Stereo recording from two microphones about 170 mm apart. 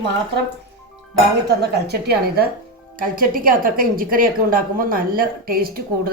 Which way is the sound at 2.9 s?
55° right (ahead or behind).